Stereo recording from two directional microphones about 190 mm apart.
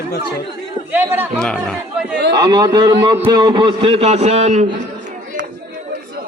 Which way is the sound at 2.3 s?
20° right (ahead or behind).